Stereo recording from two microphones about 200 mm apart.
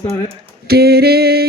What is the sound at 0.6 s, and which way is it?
Female singing, 50° right (ahead or behind).